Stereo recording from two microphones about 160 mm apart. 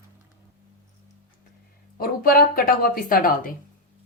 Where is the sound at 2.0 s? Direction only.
70° left (ahead or behind).